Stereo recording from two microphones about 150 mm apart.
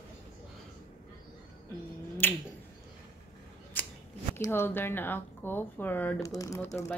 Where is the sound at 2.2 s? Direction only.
15° left (ahead or behind).